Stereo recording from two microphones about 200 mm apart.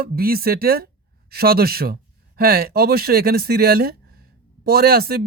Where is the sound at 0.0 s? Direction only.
50° right (ahead or behind).